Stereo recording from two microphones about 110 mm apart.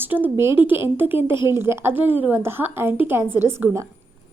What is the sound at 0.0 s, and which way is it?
A woman's voice, 15° right (ahead or behind).